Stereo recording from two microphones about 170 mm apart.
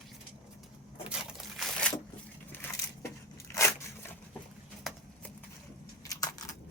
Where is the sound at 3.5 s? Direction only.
15° left (ahead or behind).